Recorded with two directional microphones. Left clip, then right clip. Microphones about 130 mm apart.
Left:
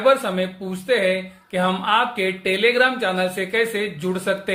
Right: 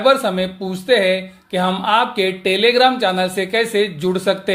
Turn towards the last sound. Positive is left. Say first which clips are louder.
# right 5 dB
turn(degrees=-40)  # may be behind; listen again after turning